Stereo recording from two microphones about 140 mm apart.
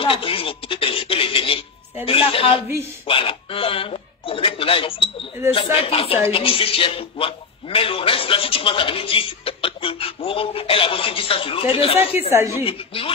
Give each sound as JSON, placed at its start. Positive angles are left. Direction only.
{"t": 0.0, "sound": "a sound", "side_deg": 40}
{"t": 2.0, "sound": "speech", "side_deg": 40}
{"t": 12.3, "sound": "a woman's voice", "side_deg": -20}
{"t": 12.6, "sound": "speech", "side_deg": 40}